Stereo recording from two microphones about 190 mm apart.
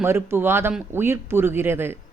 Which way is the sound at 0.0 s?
10° right (ahead or behind).